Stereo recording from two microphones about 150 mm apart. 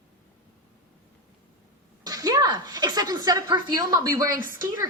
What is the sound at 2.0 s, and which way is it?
A woman's voice, 25° right (ahead or behind).